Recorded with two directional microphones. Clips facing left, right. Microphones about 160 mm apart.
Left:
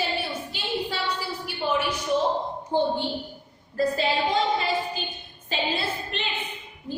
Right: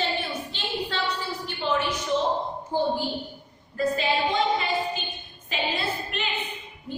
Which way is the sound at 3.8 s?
35° left (ahead or behind).